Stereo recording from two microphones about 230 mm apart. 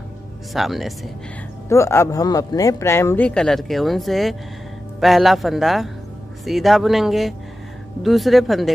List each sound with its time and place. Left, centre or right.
0.5 s speech: centre
1.7 s a man's voice: centre